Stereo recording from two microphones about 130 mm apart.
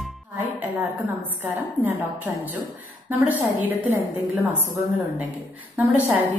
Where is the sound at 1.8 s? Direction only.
15° right (ahead or behind).